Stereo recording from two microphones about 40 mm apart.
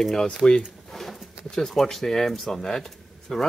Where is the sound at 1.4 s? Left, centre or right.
Centre.